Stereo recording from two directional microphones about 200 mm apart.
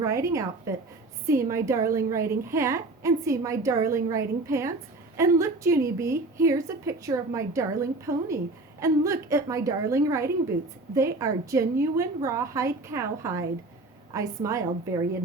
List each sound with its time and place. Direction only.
0.0 s a woman's voice: 15° right (ahead or behind)